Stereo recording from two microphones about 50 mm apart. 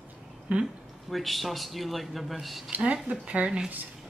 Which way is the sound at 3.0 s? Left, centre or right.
Right.